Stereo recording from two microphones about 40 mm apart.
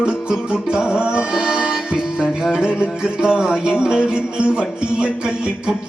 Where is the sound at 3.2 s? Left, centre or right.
Centre.